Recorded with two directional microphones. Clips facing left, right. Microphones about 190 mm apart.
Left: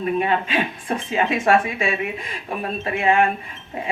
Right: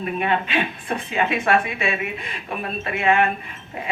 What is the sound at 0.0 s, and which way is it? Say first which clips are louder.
Speech: left 2 dB; 35° left (ahead or behind).